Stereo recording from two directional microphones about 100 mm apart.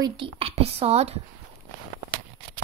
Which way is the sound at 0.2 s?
75° right (ahead or behind).